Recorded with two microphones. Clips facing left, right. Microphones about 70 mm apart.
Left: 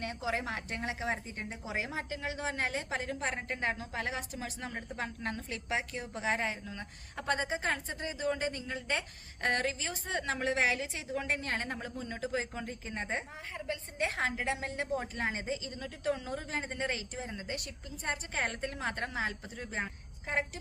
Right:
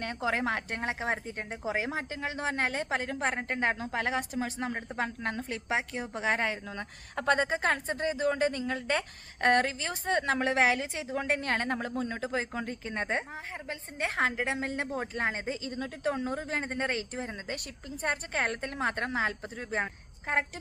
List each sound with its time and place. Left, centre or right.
0.0 s a woman's voice: right
13.7 s a woman's voice: right